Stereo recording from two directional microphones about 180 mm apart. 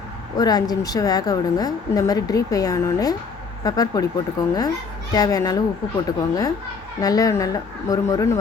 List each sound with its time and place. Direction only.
0.3 s a woman's voice: 20° left (ahead or behind)